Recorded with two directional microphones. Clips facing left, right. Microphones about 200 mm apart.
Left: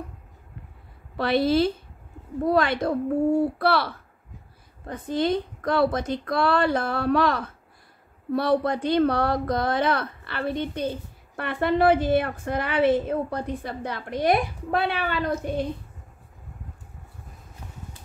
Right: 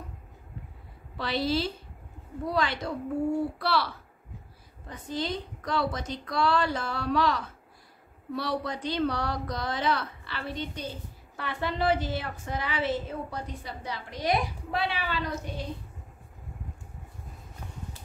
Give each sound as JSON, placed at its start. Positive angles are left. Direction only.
{"t": 1.1, "sound": "a woman's voice", "side_deg": 55}